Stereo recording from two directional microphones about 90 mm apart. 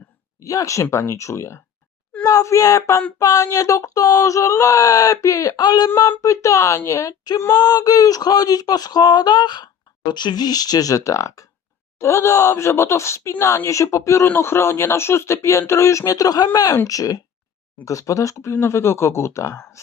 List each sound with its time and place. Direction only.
0.4 s speech: 40° left (ahead or behind)
6.1 s speech: 35° left (ahead or behind)